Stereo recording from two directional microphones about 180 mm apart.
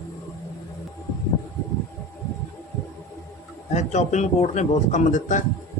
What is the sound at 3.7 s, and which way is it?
A man's voice, 40° left (ahead or behind).